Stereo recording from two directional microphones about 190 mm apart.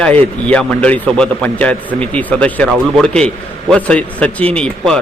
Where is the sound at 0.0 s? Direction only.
5° left (ahead or behind).